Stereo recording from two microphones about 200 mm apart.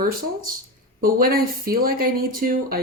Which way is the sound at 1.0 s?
45° right (ahead or behind).